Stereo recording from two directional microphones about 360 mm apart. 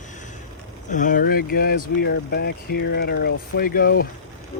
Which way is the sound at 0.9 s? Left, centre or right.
Left.